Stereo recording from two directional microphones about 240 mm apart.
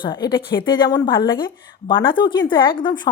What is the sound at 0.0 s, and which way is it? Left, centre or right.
A woman's voice, centre.